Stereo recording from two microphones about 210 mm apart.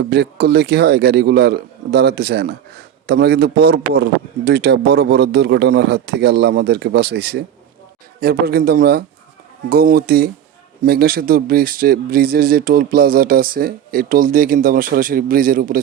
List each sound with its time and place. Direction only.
0.1 s speech: 50° right (ahead or behind)